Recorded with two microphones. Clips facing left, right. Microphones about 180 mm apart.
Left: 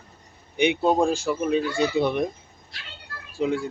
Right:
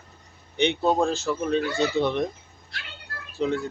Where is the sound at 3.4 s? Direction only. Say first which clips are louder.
Left 1 dB; 10° left (ahead or behind).